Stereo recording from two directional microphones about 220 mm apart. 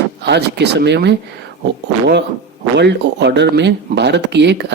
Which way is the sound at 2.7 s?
50° right (ahead or behind).